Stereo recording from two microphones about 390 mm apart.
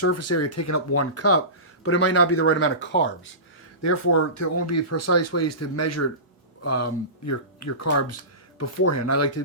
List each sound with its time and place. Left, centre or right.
0.0 s speech: left
3.8 s speech: left